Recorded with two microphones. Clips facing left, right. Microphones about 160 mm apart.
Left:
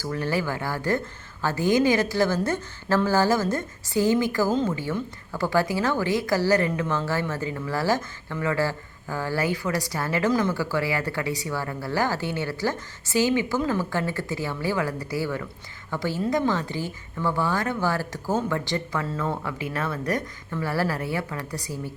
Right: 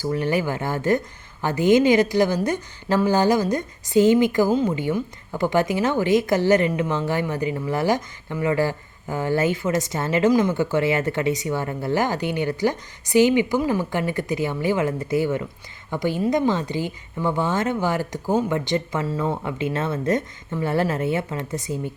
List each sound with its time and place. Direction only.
0.0 s speech: 20° right (ahead or behind)